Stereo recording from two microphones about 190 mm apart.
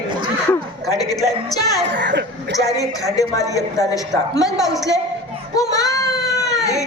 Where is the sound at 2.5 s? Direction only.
15° left (ahead or behind).